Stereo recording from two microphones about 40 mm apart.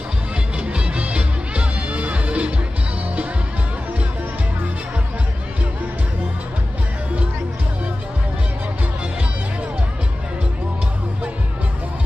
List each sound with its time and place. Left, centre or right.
0.6 s music: right